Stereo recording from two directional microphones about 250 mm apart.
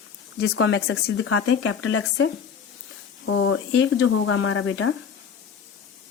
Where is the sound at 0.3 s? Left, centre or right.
Left.